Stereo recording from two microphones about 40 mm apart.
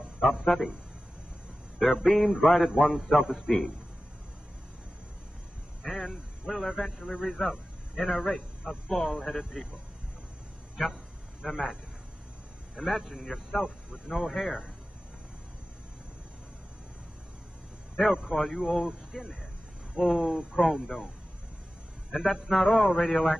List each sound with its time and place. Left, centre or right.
0.2 s a man's voice: centre
1.8 s a man's voice: centre
5.8 s a man's voice: centre
11.4 s a man's voice: centre
18.1 s a man's voice: centre
22.1 s a man's voice: centre